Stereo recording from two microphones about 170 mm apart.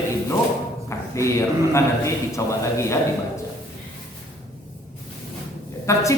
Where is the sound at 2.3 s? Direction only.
15° left (ahead or behind).